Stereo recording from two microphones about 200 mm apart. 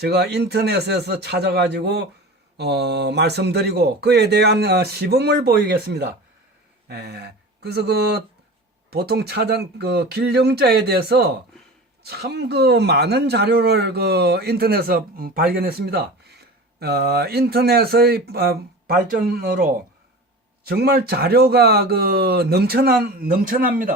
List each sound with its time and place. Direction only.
0.0 s a man's voice: 55° right (ahead or behind)
20.7 s speech: 50° right (ahead or behind)